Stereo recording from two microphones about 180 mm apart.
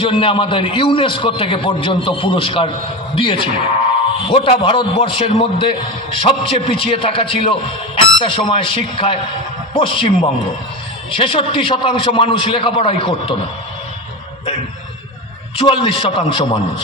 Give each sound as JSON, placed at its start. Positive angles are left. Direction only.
{"t": 0.0, "sound": "a man's voice", "side_deg": 30}
{"t": 15.5, "sound": "a man's voice", "side_deg": 30}